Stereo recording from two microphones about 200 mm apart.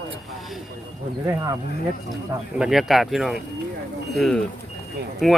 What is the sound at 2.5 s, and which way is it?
Speech, 5° right (ahead or behind).